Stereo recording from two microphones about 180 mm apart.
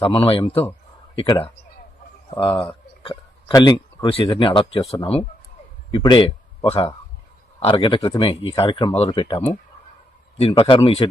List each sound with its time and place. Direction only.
0.0 s speech: 30° left (ahead or behind)
2.4 s speech: 30° left (ahead or behind)
5.9 s speech: 25° left (ahead or behind)